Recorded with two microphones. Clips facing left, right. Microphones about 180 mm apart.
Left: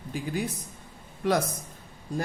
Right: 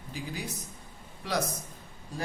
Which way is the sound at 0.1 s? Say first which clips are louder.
Left 7 dB; 55° left (ahead or behind).